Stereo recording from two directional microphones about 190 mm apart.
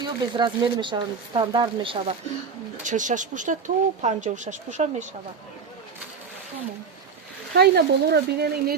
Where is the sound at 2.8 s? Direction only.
40° right (ahead or behind).